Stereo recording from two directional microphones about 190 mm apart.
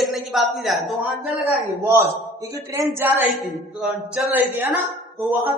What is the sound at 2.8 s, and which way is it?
A man's voice, 15° right (ahead or behind).